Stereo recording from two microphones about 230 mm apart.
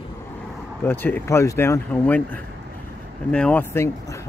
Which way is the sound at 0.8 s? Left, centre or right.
Centre.